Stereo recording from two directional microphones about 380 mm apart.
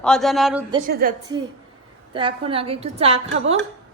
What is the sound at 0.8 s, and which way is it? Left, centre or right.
A woman's voice, right.